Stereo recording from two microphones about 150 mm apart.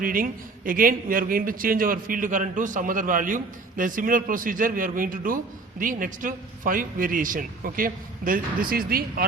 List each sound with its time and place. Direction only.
0.0 s a man's voice: 65° right (ahead or behind)